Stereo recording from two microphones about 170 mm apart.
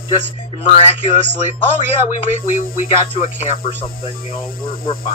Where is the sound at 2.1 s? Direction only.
45° left (ahead or behind).